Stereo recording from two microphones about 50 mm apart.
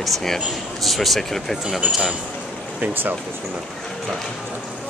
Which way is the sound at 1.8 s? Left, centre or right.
Right.